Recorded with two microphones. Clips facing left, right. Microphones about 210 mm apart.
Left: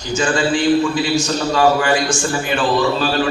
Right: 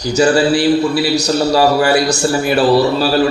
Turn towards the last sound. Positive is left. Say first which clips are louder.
# right 4 dB
turn(degrees=-35)  # may be behind; listen again after turning